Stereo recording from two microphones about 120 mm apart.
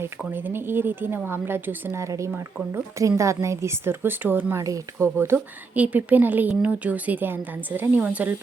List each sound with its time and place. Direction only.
0.0 s a woman's voice: 15° right (ahead or behind)